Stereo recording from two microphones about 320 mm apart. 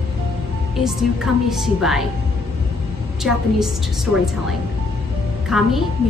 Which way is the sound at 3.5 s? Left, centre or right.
Centre.